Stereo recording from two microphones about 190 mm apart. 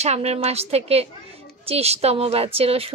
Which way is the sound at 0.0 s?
35° right (ahead or behind).